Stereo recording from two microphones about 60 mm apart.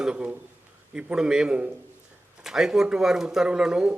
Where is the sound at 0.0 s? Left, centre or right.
Centre.